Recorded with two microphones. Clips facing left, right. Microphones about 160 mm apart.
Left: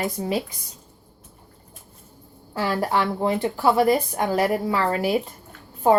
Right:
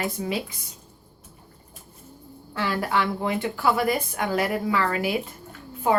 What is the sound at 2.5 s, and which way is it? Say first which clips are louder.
Speech: left 2 dB; 35° left (ahead or behind).